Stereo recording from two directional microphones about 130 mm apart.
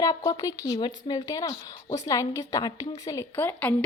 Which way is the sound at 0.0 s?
25° left (ahead or behind).